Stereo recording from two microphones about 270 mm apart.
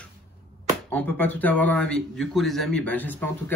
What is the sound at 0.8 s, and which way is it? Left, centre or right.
Speech, centre.